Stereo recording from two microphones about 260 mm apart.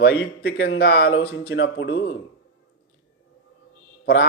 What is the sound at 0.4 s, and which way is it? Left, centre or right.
Speech, left.